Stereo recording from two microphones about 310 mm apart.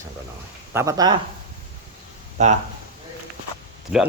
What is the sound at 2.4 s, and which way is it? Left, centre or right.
Speech, right.